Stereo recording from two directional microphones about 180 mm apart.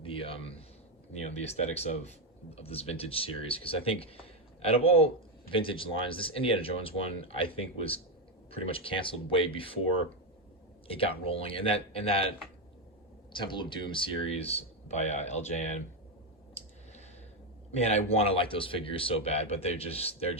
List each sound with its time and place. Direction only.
0.0 s a man's voice: 30° left (ahead or behind)
10.8 s speech: 30° left (ahead or behind)
13.3 s speech: 25° left (ahead or behind)
17.7 s speech: 35° left (ahead or behind)